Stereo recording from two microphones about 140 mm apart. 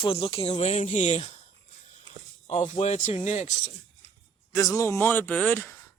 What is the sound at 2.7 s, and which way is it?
Speech, 55° left (ahead or behind).